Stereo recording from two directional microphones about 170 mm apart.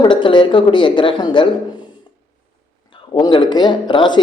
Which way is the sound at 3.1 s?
30° left (ahead or behind).